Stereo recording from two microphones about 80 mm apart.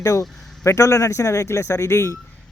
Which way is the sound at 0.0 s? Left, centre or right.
Left.